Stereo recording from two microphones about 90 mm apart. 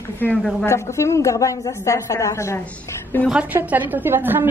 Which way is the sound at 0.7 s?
30° left (ahead or behind).